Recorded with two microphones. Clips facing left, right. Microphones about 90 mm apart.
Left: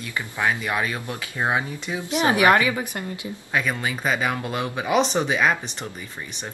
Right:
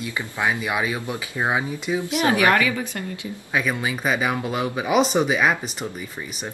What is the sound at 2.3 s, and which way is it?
Speech, 20° left (ahead or behind).